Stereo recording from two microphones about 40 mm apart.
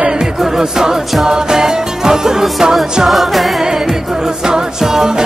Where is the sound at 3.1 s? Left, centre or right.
Centre.